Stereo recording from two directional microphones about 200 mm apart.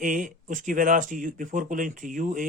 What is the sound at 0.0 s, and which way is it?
Speech, 40° right (ahead or behind).